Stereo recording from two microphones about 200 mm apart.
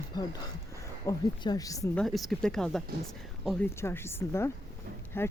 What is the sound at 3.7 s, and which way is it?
A woman's voice, 10° left (ahead or behind).